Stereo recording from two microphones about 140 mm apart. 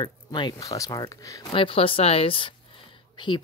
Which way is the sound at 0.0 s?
35° left (ahead or behind).